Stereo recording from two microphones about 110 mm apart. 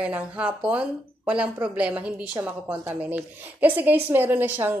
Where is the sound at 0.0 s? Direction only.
10° right (ahead or behind).